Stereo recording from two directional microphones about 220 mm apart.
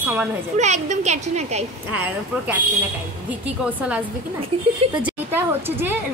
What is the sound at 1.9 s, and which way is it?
Speech, 5° right (ahead or behind).